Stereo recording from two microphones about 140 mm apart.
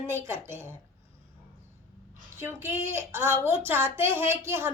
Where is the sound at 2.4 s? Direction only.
15° right (ahead or behind).